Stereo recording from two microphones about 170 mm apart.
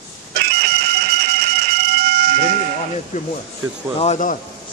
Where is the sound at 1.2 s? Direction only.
65° right (ahead or behind).